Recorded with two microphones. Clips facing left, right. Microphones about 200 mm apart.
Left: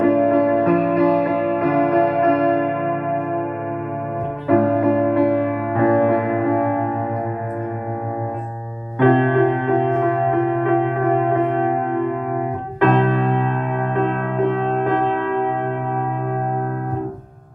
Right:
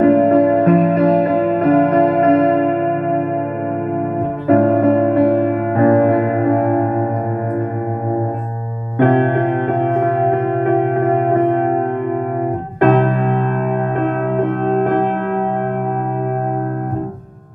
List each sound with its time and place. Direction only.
0.0 s music: 50° right (ahead or behind)
4.5 s music: 45° right (ahead or behind)
8.9 s music: 50° right (ahead or behind)
12.8 s music: 50° right (ahead or behind)
14.7 s music: 50° right (ahead or behind)